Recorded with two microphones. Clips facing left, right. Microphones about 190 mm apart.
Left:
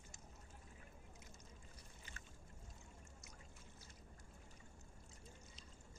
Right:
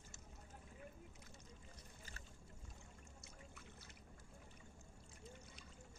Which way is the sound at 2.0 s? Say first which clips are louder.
Even; 35° right (ahead or behind).